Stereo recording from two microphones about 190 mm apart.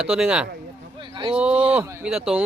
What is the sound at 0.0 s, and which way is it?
Speech, 5° right (ahead or behind).